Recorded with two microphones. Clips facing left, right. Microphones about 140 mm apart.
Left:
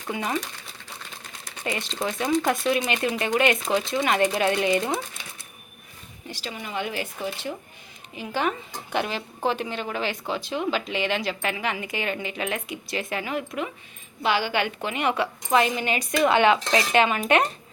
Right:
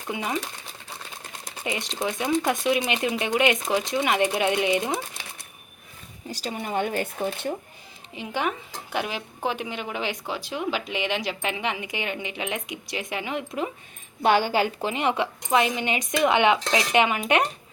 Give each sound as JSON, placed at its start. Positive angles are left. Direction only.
{"t": 0.1, "sound": "speech", "side_deg": -5}
{"t": 1.6, "sound": "speech", "side_deg": -15}
{"t": 6.3, "sound": "speech", "side_deg": -45}
{"t": 8.1, "sound": "a woman's voice", "side_deg": -25}
{"t": 8.4, "sound": "speech", "side_deg": -10}
{"t": 14.2, "sound": "a woman's voice", "side_deg": -50}